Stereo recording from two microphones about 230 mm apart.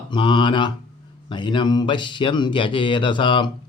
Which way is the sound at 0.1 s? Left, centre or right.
Left.